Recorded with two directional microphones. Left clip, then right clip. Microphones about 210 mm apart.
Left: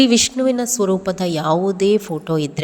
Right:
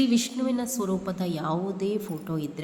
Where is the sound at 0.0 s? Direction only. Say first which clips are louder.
Left 11 dB; 40° left (ahead or behind).